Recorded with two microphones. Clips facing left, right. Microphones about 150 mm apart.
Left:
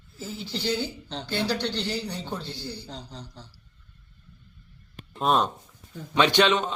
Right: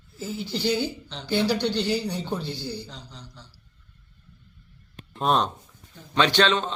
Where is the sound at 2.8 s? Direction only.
40° left (ahead or behind).